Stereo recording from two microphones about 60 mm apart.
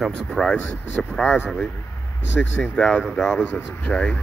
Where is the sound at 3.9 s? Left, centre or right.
Centre.